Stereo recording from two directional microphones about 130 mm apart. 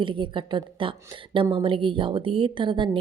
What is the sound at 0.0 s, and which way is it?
A woman's voice, 40° right (ahead or behind).